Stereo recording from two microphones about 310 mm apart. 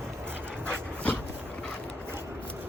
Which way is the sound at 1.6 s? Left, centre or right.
Centre.